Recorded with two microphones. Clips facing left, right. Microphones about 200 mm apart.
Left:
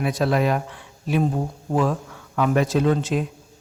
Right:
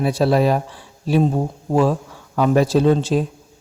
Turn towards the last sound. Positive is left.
turn(degrees=-30)  # may be behind; listen again after turning